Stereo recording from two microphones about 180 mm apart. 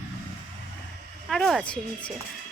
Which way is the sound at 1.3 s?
Centre (ahead or behind).